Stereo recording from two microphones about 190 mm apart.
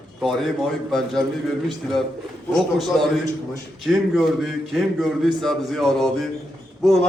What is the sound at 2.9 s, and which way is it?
A man's voice, 5° left (ahead or behind).